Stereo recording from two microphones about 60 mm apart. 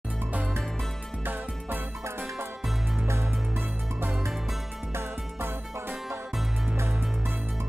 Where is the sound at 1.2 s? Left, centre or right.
Right.